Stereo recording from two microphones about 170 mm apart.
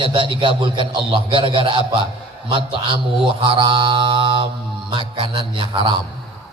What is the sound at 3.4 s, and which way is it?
Mantra, 30° right (ahead or behind).